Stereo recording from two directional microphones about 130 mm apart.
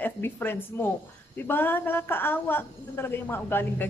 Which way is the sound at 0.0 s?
15° left (ahead or behind).